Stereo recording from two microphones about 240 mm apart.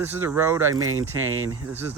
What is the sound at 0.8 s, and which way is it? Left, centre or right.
Speech, right.